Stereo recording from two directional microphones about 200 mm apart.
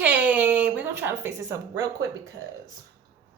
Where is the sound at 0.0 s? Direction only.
10° right (ahead or behind).